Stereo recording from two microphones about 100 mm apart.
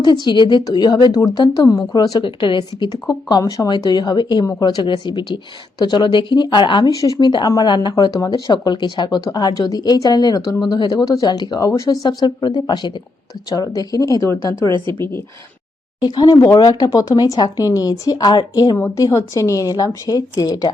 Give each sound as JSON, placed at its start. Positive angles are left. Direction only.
{"t": 0.0, "sound": "speech", "side_deg": 50}
{"t": 3.1, "sound": "speech", "side_deg": 40}
{"t": 6.9, "sound": "speech", "side_deg": 35}
{"t": 16.0, "sound": "speech", "side_deg": 40}
{"t": 18.8, "sound": "speech", "side_deg": 30}